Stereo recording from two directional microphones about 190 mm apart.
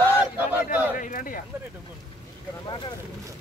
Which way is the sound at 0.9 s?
45° left (ahead or behind).